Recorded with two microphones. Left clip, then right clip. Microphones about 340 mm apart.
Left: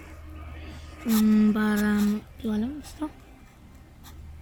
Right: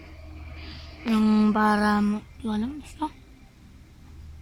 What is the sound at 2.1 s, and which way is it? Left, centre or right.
Speech, centre.